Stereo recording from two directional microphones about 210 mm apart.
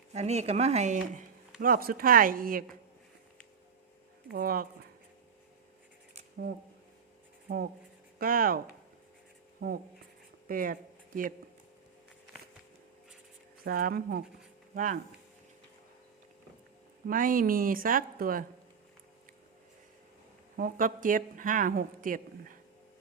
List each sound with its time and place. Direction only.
0.1 s speech: 30° right (ahead or behind)
4.3 s speech: 45° right (ahead or behind)
7.4 s speech: 45° right (ahead or behind)
13.7 s speech: 45° right (ahead or behind)
17.1 s speech: 40° right (ahead or behind)
20.6 s speech: 40° right (ahead or behind)